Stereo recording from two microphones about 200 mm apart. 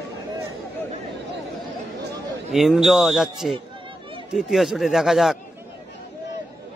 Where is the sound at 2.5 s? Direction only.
Centre (ahead or behind).